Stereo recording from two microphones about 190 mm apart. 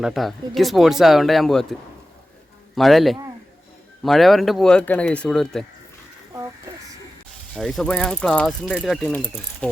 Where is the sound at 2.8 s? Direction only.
Centre (ahead or behind).